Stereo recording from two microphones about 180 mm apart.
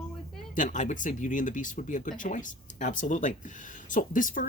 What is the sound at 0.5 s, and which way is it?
Speech, 45° left (ahead or behind).